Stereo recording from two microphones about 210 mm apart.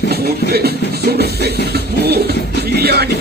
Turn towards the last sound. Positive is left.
turn(degrees=-50)  # may be behind; listen again after turning